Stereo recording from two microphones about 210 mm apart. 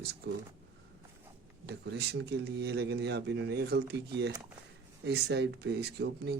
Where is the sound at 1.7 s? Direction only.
50° right (ahead or behind).